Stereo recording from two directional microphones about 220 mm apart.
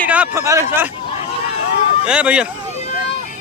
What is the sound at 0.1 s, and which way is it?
Speech, 10° right (ahead or behind).